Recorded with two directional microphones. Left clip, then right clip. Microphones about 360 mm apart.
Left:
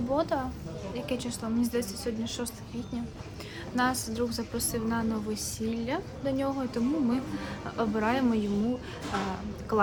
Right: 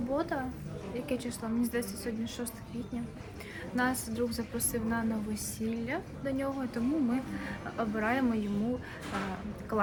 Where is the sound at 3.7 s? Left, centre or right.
Centre.